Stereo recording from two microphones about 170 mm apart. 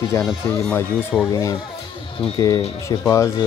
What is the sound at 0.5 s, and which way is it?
A man's voice, 15° left (ahead or behind).